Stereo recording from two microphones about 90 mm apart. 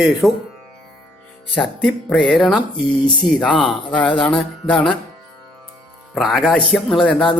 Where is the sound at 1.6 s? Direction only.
5° left (ahead or behind).